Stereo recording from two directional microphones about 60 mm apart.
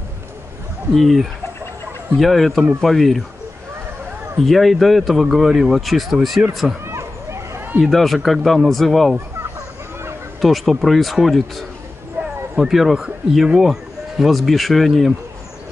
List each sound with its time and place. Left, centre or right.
0.9 s speech: centre
4.5 s speech: centre
6.4 s speech: centre
6.9 s a sound: right
7.9 s speech: centre
10.4 s speech: centre
12.2 s a sound: right
12.5 s speech: centre